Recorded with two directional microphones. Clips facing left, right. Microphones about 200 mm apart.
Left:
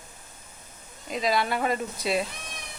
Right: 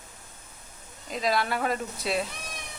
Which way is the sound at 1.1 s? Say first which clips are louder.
Left 1 dB; centre (ahead or behind).